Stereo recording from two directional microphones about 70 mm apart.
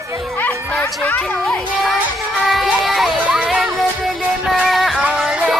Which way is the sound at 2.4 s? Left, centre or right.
Centre.